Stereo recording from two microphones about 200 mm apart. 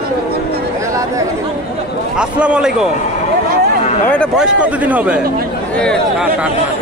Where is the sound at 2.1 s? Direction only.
5° right (ahead or behind).